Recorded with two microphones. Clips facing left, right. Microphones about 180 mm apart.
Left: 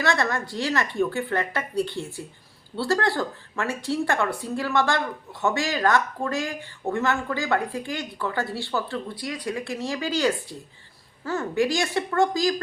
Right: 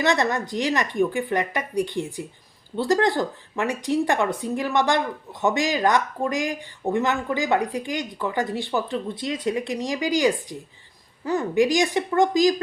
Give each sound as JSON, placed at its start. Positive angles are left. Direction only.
{"t": 0.0, "sound": "speech", "side_deg": -20}